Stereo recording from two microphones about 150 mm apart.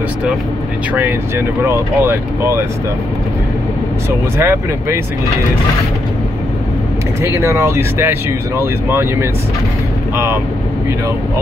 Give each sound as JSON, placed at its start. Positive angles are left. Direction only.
{"t": 1.6, "sound": "speech", "side_deg": -15}
{"t": 4.4, "sound": "speech", "side_deg": -15}
{"t": 7.2, "sound": "speech", "side_deg": -15}